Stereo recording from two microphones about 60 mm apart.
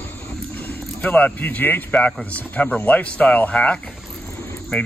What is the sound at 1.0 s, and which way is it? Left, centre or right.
Speech, left.